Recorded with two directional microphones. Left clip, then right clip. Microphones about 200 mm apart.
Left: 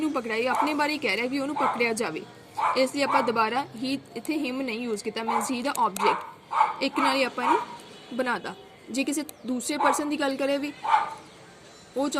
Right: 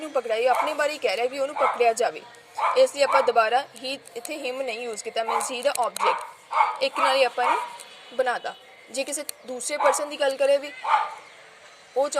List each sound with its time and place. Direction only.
0.0 s speech: 15° right (ahead or behind)